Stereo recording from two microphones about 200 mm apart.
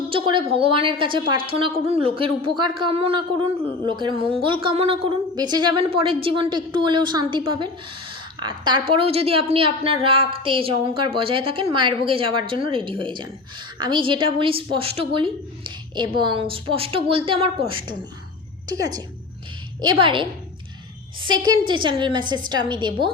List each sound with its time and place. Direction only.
0.1 s a woman's voice: 25° right (ahead or behind)